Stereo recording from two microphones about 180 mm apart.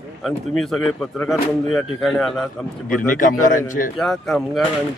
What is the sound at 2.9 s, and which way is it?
A man's voice, 45° left (ahead or behind).